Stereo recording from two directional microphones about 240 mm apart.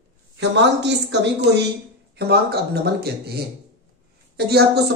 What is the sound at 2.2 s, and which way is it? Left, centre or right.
Speech, right.